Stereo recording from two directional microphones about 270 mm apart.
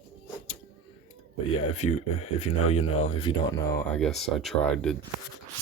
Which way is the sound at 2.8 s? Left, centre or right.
Left.